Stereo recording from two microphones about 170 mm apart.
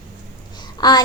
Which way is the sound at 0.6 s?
25° left (ahead or behind).